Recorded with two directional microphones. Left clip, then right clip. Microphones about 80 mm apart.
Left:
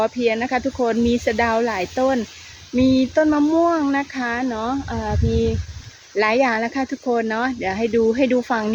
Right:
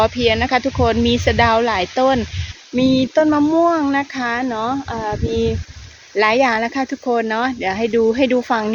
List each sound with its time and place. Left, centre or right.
0.0 s speech: centre
2.7 s speech: centre